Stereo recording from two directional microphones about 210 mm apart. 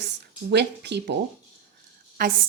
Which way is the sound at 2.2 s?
45° right (ahead or behind).